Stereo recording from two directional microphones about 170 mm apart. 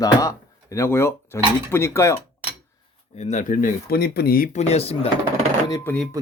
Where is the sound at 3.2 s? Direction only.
45° left (ahead or behind).